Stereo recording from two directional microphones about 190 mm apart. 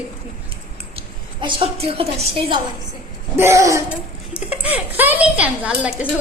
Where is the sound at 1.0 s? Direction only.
25° right (ahead or behind).